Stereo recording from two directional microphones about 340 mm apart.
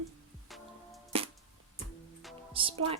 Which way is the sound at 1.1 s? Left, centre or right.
Centre.